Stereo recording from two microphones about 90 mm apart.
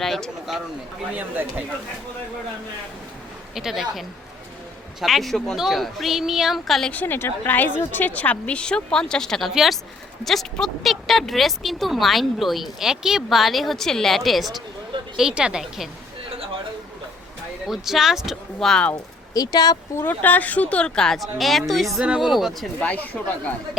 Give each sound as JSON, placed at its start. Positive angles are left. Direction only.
{"t": 0.0, "sound": "speech", "side_deg": 0}
{"t": 1.1, "sound": "speech", "side_deg": -20}
{"t": 3.5, "sound": "speech", "side_deg": -5}
{"t": 6.9, "sound": "a woman's voice", "side_deg": 20}
{"t": 17.7, "sound": "speech", "side_deg": -5}
{"t": 18.7, "sound": "a woman's voice", "side_deg": 15}
{"t": 19.3, "sound": "speech", "side_deg": 45}
{"t": 20.0, "sound": "a woman's voice", "side_deg": 20}
{"t": 22.8, "sound": "a woman's voice", "side_deg": 15}